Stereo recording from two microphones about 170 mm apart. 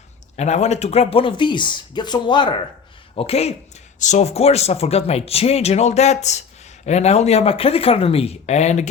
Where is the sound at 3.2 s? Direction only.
35° left (ahead or behind).